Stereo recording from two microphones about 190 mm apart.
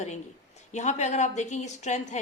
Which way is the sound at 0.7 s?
40° left (ahead or behind).